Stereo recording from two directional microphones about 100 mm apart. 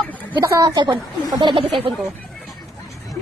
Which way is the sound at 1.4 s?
60° right (ahead or behind).